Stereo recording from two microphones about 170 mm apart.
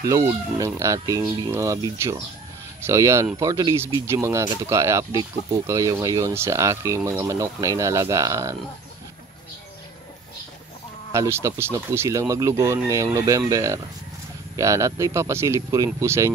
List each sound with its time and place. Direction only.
0.0 s speech: 15° right (ahead or behind)
11.1 s speech: 15° right (ahead or behind)